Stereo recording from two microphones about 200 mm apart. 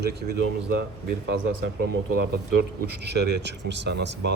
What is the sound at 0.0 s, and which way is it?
Speech, 55° right (ahead or behind).